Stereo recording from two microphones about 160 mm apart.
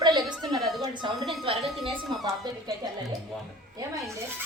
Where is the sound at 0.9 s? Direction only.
30° right (ahead or behind).